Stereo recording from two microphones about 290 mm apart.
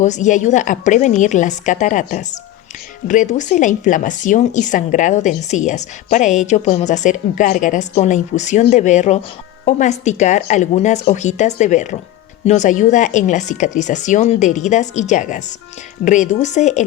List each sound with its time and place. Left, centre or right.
0.0 s a woman's voice: left